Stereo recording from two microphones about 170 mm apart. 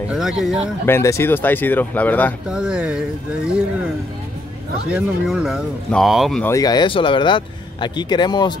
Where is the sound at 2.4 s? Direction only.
5° right (ahead or behind).